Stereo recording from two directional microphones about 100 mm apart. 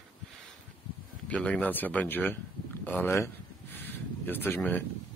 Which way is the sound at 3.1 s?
25° left (ahead or behind).